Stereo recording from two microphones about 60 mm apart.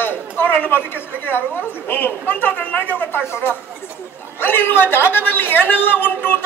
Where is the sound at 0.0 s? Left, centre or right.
Left.